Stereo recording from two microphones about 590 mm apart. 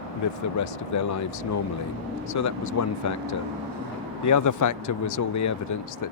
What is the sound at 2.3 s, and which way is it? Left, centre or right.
Speech, left.